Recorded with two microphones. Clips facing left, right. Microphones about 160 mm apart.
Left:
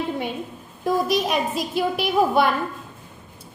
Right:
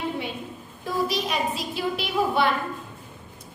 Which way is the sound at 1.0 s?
50° left (ahead or behind).